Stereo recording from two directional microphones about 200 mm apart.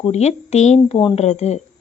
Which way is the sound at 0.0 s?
35° left (ahead or behind).